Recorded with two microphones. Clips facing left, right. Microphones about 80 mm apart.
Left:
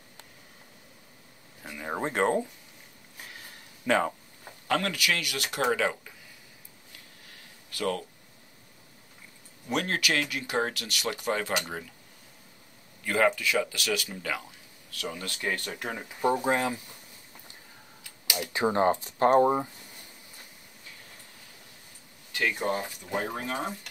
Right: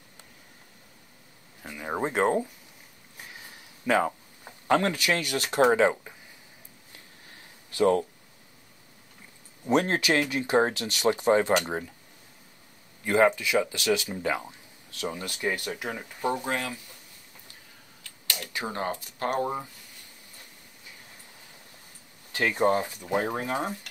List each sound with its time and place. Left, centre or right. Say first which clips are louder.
1.6 s speech: right 2 dB; centre
3.2 s a sound: right 1 dB; centre
4.6 s speech: right 4 dB; right
7.2 s a sound: right 1 dB; right
9.7 s speech: right 5 dB; right
13.0 s speech: right 3 dB; right
15.3 s speech: right 1 dB; centre
15.9 s speech: right 1 dB; centre
16.5 s speech: left 4 dB; left
18.0 s computer keyboard: left 3 dB; centre
18.5 s speech: left 8 dB; left
22.3 s speech: right 5 dB; right
23.5 s speech: right 3 dB; centre